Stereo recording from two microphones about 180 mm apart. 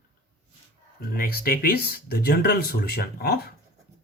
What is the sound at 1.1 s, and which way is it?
Speech, 55° left (ahead or behind).